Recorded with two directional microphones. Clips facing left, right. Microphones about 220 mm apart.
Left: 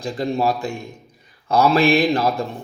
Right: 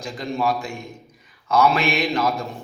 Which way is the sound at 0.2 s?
35° left (ahead or behind).